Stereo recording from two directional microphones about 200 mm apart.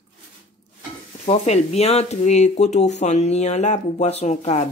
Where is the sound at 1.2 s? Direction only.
35° left (ahead or behind).